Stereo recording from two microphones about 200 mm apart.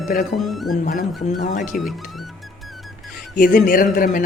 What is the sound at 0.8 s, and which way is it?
Speech, 45° left (ahead or behind).